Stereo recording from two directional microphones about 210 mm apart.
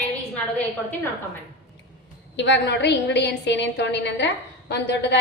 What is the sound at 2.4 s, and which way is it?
A woman's voice, 55° left (ahead or behind).